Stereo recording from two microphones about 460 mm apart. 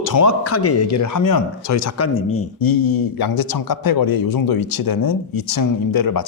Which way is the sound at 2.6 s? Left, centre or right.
Left.